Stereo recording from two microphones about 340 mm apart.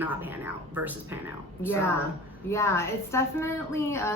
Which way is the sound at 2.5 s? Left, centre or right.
Centre.